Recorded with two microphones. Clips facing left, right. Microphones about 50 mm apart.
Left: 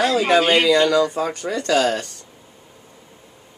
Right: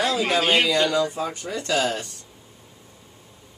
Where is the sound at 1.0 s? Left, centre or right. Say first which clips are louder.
Left 5 dB; left.